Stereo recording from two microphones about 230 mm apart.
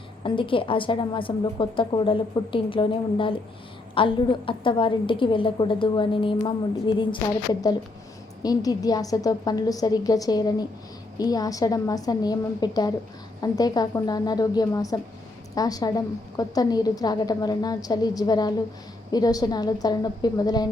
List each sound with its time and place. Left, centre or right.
0.2 s a woman's voice: left
8.4 s a woman's voice: centre